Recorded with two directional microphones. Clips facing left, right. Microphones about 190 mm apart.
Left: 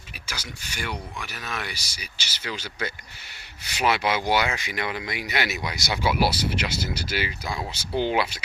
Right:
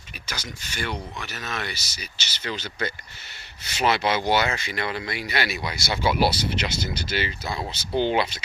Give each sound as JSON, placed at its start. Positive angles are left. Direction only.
{"t": 0.3, "sound": "speech", "side_deg": 10}